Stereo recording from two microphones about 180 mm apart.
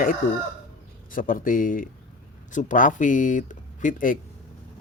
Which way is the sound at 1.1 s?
50° left (ahead or behind).